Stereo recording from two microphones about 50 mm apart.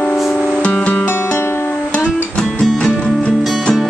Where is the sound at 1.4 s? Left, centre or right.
Left.